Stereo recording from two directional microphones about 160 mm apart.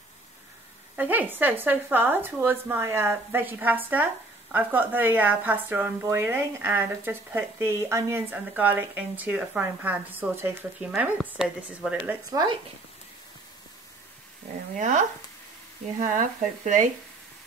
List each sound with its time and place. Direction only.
0.9 s a woman's voice: 10° right (ahead or behind)
12.3 s speech: 25° right (ahead or behind)
14.8 s speech: 50° right (ahead or behind)